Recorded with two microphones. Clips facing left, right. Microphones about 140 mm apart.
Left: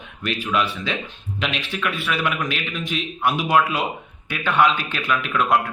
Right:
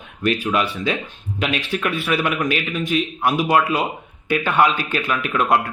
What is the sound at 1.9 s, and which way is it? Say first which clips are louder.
Speech: right 2 dB; centre (ahead or behind).